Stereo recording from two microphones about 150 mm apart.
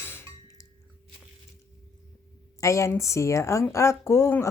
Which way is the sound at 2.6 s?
20° left (ahead or behind).